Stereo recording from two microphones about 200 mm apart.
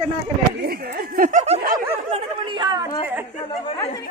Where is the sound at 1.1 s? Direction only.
40° right (ahead or behind).